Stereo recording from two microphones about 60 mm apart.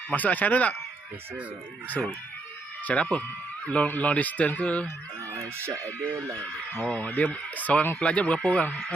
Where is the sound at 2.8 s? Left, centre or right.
Centre.